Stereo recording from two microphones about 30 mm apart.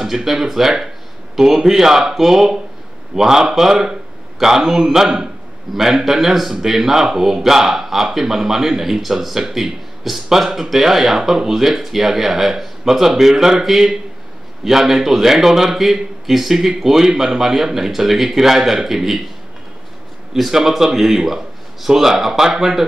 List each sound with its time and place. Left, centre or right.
0.0 s a man's voice: centre
20.3 s speech: centre